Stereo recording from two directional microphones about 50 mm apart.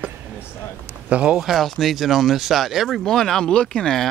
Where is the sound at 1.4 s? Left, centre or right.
Centre.